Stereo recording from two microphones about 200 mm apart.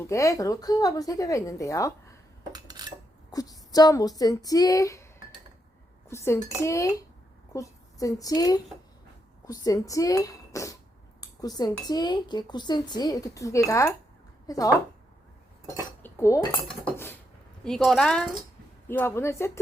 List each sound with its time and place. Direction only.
0.1 s a woman's voice: 15° left (ahead or behind)
2.5 s dishes: 20° right (ahead or behind)
3.3 s a woman's voice: 20° left (ahead or behind)
6.1 s a woman's voice: 15° left (ahead or behind)
15.7 s cutlery: 15° left (ahead or behind)
17.6 s a woman's voice: centre (ahead or behind)